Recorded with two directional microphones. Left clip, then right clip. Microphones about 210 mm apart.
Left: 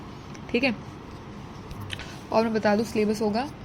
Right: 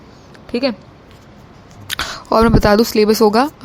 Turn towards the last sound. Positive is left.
turn(degrees=-55)  # may be behind; listen again after turning